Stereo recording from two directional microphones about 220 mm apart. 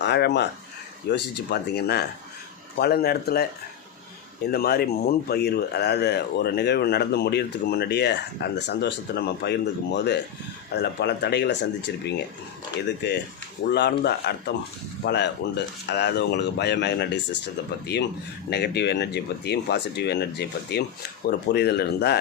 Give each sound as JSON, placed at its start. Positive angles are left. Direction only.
{"t": 0.0, "sound": "speech", "side_deg": 50}
{"t": 4.5, "sound": "speech", "side_deg": 45}
{"t": 13.0, "sound": "speech", "side_deg": 50}
{"t": 18.5, "sound": "speech", "side_deg": 50}